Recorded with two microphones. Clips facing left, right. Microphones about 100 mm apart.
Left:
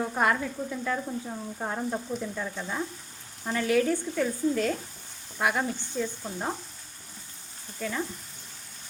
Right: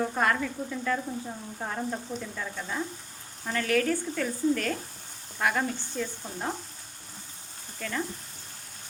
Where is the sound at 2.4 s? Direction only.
10° left (ahead or behind).